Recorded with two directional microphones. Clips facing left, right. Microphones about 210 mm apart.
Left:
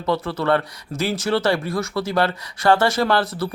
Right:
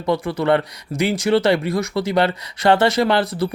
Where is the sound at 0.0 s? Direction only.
15° right (ahead or behind).